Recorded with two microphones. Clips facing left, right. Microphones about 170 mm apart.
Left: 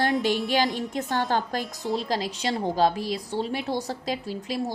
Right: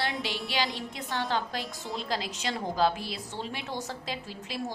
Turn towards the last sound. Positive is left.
turn(degrees=40)  # may be behind; listen again after turning